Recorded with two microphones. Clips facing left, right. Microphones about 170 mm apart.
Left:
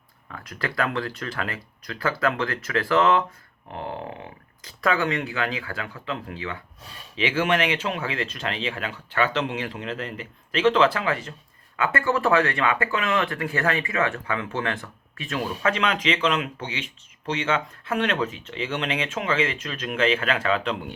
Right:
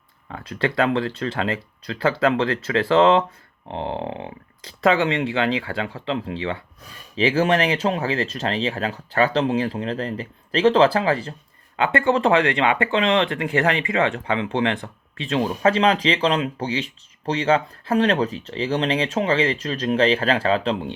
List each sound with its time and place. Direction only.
0.3 s speech: 25° right (ahead or behind)
11.8 s speech: 20° right (ahead or behind)